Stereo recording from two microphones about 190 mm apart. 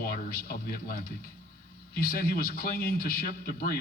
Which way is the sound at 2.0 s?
55° left (ahead or behind).